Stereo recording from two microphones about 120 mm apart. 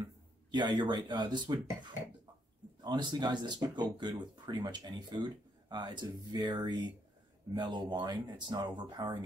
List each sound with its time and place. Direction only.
0.5 s speech: 40° right (ahead or behind)